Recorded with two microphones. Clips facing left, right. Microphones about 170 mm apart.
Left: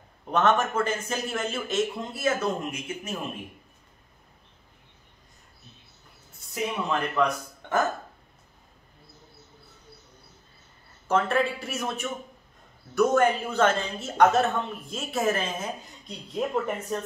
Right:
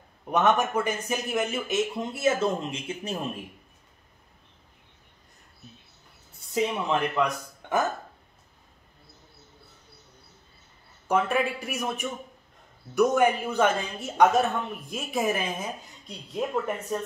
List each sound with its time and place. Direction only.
0.3 s a man's voice: 15° right (ahead or behind); by 3.2 s 30° right (ahead or behind)
6.5 s a man's voice: 20° right (ahead or behind)
11.1 s a man's voice: 10° right (ahead or behind)
16.3 s speech: centre (ahead or behind)